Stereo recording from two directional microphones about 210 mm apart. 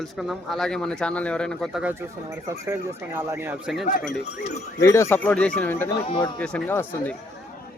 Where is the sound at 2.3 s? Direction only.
15° right (ahead or behind).